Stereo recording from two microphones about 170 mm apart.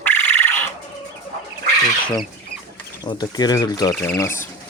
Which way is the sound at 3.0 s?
25° left (ahead or behind).